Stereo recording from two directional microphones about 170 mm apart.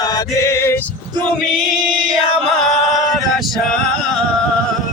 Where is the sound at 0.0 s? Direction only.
25° left (ahead or behind).